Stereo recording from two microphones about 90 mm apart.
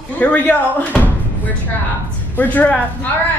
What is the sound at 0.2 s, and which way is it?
A woman's voice, 20° left (ahead or behind).